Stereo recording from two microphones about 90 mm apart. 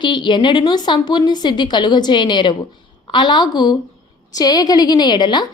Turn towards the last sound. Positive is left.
turn(degrees=55)  # may be behind; listen again after turning